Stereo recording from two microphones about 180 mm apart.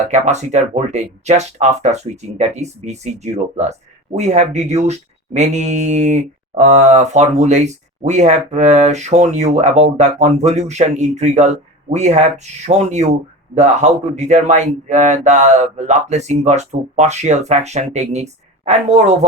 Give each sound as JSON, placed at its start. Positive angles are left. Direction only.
{"t": 0.0, "sound": "speech", "side_deg": -40}